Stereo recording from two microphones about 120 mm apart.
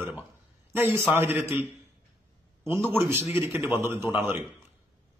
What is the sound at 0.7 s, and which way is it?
A man's voice, 20° right (ahead or behind).